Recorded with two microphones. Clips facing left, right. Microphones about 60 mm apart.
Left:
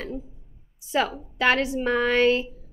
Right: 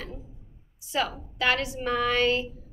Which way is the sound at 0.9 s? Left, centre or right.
Left.